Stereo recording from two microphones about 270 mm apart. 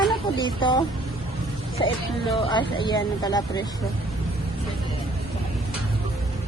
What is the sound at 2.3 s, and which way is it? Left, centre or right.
Speech, centre.